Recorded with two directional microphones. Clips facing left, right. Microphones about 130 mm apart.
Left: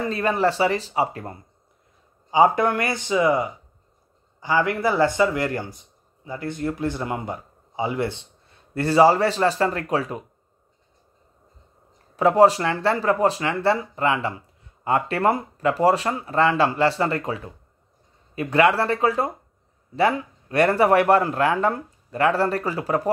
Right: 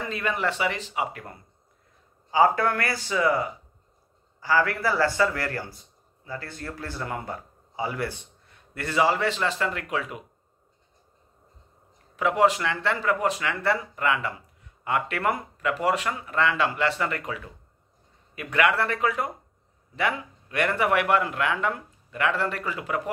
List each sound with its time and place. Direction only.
0.1 s speech: 35° left (ahead or behind)
2.3 s speech: 20° left (ahead or behind); by 10.2 s 35° left (ahead or behind)
12.2 s speech: 35° left (ahead or behind)